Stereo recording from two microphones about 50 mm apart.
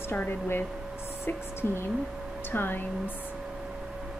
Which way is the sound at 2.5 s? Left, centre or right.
Left.